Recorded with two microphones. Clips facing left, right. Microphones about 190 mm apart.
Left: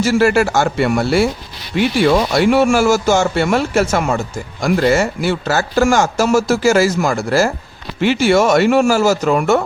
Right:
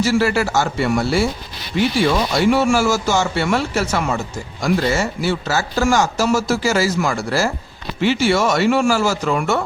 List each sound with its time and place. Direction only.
0.0 s speech: 50° left (ahead or behind)
2.4 s speech: 60° left (ahead or behind)